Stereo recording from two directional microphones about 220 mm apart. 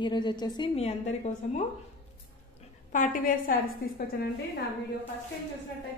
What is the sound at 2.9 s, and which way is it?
Speech, 35° left (ahead or behind).